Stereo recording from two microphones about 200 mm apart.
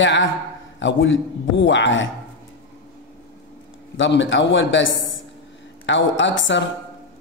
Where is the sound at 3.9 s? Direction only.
65° left (ahead or behind).